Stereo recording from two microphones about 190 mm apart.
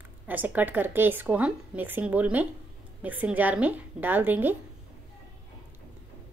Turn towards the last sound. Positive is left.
turn(degrees=-10)  # may be behind; listen again after turning